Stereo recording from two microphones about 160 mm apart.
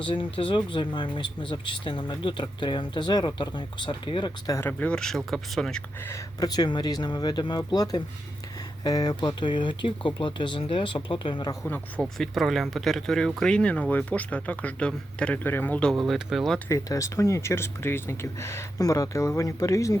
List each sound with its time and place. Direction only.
0.0 s speech: 35° left (ahead or behind); by 5.8 s 5° left (ahead or behind)
6.1 s speech: 20° left (ahead or behind)
12.0 s speech: centre (ahead or behind)
16.6 s speech: 20° left (ahead or behind)